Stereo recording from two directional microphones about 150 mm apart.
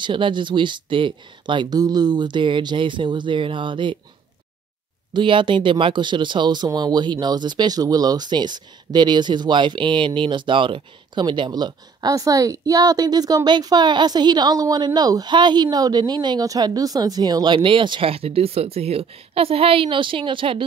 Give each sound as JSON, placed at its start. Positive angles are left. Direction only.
{"t": 0.0, "sound": "speech", "side_deg": -30}
{"t": 5.1, "sound": "speech", "side_deg": -35}